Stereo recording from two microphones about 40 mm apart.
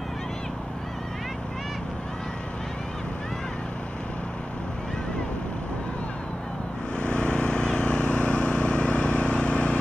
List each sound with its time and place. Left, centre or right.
7.0 s vehicle: left